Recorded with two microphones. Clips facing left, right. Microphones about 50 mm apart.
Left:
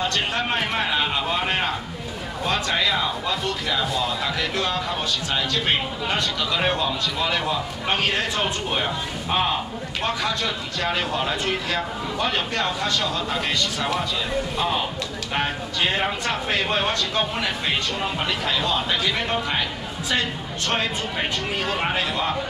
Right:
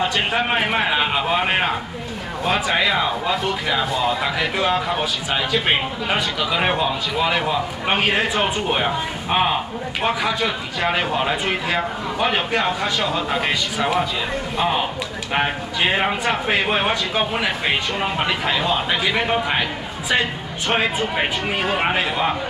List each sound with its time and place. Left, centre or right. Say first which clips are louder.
0.0 s speech: right 4 dB; centre